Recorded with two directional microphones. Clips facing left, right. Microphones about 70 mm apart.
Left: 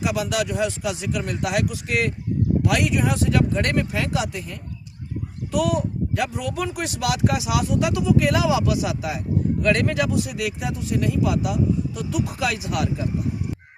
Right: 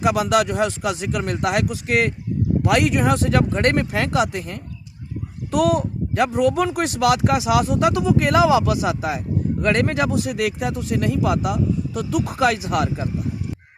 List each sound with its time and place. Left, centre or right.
0.0 s speech: right